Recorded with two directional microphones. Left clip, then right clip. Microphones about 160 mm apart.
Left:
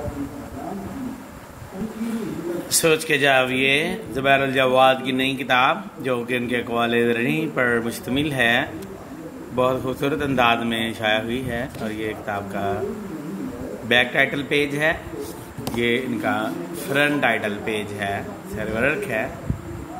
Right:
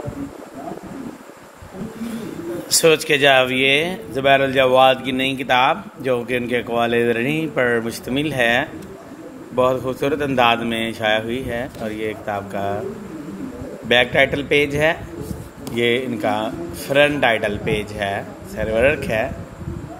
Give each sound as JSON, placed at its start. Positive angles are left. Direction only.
{"t": 2.7, "sound": "a man's voice", "side_deg": -40}
{"t": 13.8, "sound": "a man's voice", "side_deg": -35}